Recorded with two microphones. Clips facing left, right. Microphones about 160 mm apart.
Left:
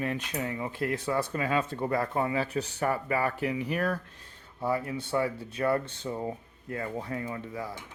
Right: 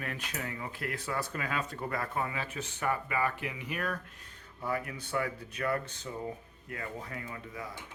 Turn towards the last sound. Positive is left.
turn(degrees=35)  # may be behind; listen again after turning